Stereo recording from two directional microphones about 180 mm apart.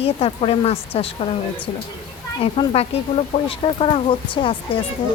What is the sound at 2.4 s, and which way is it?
Speech, 35° left (ahead or behind).